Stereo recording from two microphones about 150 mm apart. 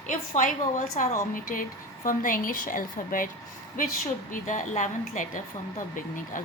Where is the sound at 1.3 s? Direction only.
65° left (ahead or behind).